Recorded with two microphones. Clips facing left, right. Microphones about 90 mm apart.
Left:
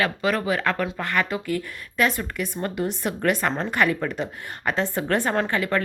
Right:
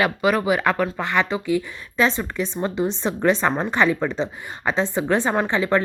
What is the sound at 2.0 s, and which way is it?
Speech, 25° right (ahead or behind).